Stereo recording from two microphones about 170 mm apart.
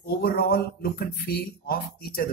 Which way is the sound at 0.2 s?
65° left (ahead or behind).